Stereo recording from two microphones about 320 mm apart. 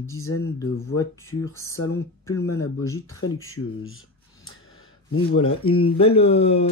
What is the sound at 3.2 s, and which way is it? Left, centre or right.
Speech, left.